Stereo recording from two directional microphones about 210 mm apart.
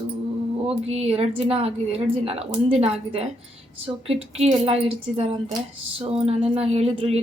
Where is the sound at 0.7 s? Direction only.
30° right (ahead or behind).